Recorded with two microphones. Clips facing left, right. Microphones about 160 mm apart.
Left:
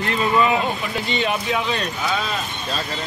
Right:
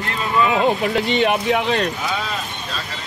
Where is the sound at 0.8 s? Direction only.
75° right (ahead or behind).